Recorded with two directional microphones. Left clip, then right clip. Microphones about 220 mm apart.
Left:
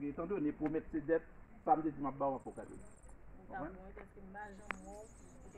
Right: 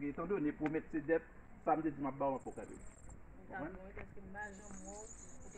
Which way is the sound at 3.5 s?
Centre (ahead or behind).